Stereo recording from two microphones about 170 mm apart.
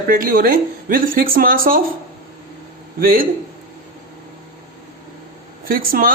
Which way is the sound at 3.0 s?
55° right (ahead or behind).